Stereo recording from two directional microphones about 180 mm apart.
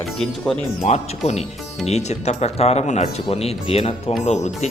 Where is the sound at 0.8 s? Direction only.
40° left (ahead or behind).